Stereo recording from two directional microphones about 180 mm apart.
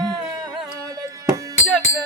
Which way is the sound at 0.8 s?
20° right (ahead or behind).